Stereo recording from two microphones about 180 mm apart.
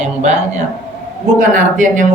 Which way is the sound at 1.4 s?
45° right (ahead or behind).